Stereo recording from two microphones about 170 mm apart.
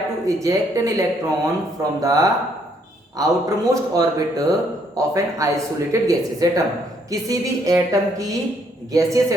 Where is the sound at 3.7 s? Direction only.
20° right (ahead or behind).